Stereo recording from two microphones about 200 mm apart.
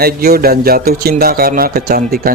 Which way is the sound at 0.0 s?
50° right (ahead or behind).